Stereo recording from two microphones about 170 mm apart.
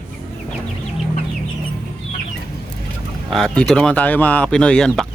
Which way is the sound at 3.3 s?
5° left (ahead or behind).